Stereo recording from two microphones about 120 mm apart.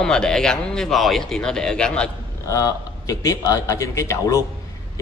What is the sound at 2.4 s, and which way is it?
A man's voice, 30° left (ahead or behind).